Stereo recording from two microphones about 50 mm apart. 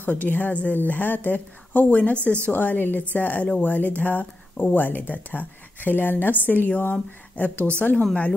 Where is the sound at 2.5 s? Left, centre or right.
Left.